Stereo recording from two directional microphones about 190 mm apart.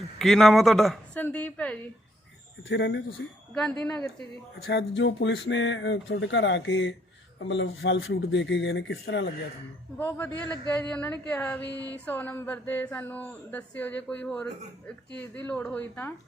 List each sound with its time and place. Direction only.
0.2 s a woman's voice: centre (ahead or behind)
2.6 s speech: 65° left (ahead or behind)
3.5 s a woman's voice: 5° left (ahead or behind)
4.6 s speech: 70° left (ahead or behind)
10.0 s speech: 10° left (ahead or behind)